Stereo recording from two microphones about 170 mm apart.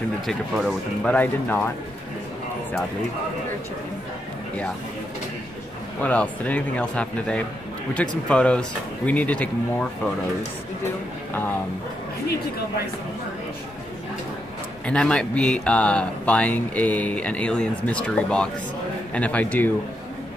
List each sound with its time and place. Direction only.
0.3 s speech: centre (ahead or behind)
6.0 s speech: 10° left (ahead or behind)
14.9 s speech: 5° left (ahead or behind)